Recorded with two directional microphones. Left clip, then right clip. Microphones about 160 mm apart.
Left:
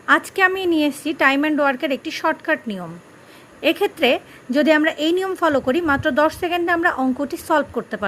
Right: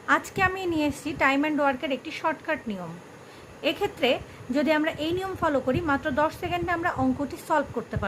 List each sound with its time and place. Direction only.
0.0 s a woman's voice: 40° left (ahead or behind)